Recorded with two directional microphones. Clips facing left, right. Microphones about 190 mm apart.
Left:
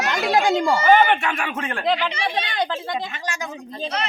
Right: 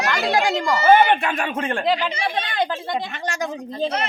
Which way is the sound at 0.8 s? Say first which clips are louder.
Right 3 dB; 35° right (ahead or behind).